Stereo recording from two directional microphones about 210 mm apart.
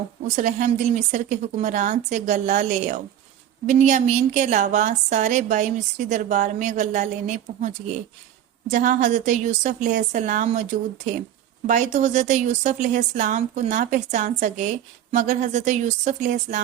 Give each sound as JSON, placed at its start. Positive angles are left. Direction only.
{"t": 0.3, "sound": "a woman's voice", "side_deg": -35}